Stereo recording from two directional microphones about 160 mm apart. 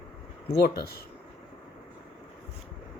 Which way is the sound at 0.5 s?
75° left (ahead or behind).